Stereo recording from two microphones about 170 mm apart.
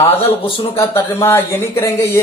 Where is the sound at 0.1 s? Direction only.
35° left (ahead or behind).